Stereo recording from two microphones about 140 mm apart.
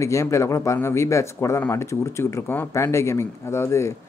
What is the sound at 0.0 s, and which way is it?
Speech, 20° left (ahead or behind).